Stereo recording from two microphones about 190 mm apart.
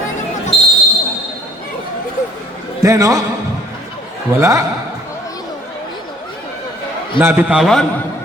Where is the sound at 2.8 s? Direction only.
15° right (ahead or behind).